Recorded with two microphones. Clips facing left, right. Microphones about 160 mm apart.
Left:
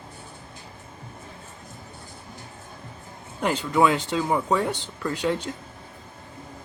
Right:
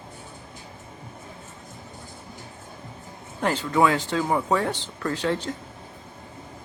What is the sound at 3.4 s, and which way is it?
Speech, 15° left (ahead or behind).